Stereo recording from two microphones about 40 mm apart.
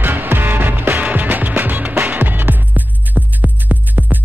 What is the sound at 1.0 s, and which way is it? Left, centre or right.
Music, right.